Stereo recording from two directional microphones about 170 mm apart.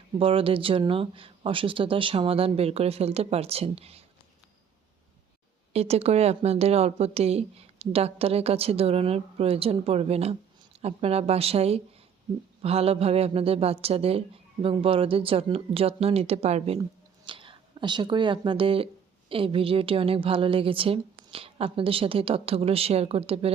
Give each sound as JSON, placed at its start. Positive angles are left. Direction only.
{"t": 0.2, "sound": "speech", "side_deg": -30}
{"t": 5.7, "sound": "speech", "side_deg": -35}